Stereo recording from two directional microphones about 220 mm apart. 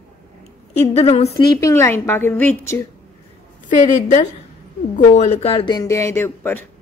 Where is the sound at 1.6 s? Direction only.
10° left (ahead or behind).